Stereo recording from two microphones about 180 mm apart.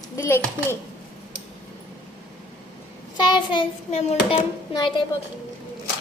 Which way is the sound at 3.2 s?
25° left (ahead or behind).